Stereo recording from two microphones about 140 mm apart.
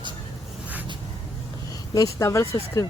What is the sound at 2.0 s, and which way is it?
Speech, 20° left (ahead or behind).